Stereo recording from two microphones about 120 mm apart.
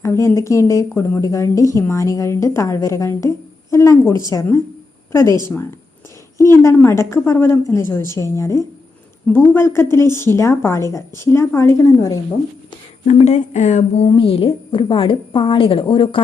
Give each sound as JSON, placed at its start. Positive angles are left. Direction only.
{"t": 0.0, "sound": "a woman's voice", "side_deg": 25}
{"t": 6.3, "sound": "a woman's voice", "side_deg": 25}
{"t": 13.1, "sound": "speech", "side_deg": 70}
{"t": 14.2, "sound": "a woman's voice", "side_deg": 50}